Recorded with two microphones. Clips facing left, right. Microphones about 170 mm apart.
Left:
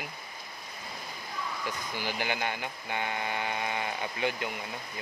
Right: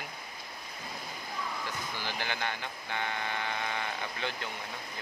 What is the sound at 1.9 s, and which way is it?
Speech, 15° left (ahead or behind).